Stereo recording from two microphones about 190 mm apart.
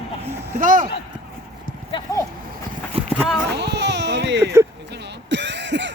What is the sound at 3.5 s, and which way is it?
Baby cry, 65° right (ahead or behind).